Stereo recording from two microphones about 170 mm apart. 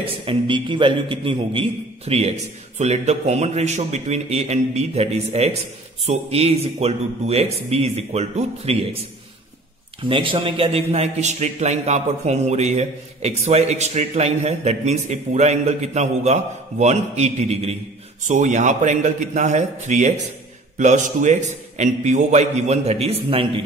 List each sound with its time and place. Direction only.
0.0 s a man's voice: 35° right (ahead or behind)
10.0 s a man's voice: 30° right (ahead or behind)